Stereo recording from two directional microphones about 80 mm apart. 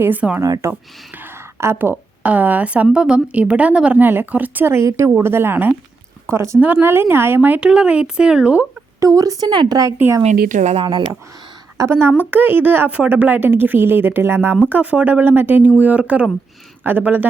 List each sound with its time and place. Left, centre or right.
0.0 s a woman's voice: right
0.4 s speech: right
0.7 s a woman's voice: right
6.3 s speech: right
6.6 s a woman's voice: right
9.0 s speech: right
9.5 s speech: right
10.0 s a woman's voice: right
11.9 s a woman's voice: right
14.7 s a woman's voice: centre